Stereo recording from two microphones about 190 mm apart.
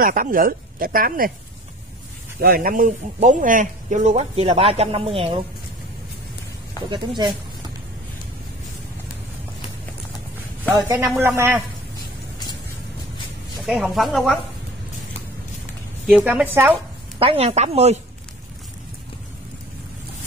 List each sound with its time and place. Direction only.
0.0 s speech: 45° right (ahead or behind)
2.4 s speech: 50° right (ahead or behind); by 5.4 s 30° right (ahead or behind)
6.9 s speech: 25° right (ahead or behind)
10.8 s a woman's voice: 20° right (ahead or behind)
13.6 s speech: centre (ahead or behind)
16.2 s a woman's voice: 10° right (ahead or behind)
17.2 s speech: 30° right (ahead or behind)